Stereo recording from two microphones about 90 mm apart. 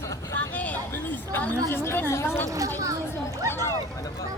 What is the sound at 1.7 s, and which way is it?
Chatter, 25° left (ahead or behind).